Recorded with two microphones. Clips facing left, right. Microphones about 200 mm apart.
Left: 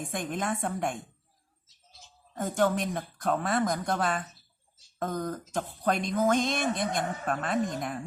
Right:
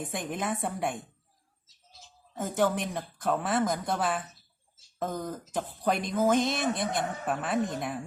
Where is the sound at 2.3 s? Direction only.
5° right (ahead or behind).